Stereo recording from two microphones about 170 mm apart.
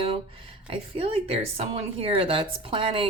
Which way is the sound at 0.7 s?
35° right (ahead or behind).